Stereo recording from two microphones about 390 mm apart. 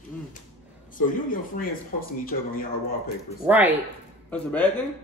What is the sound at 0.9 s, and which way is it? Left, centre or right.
Speech, left.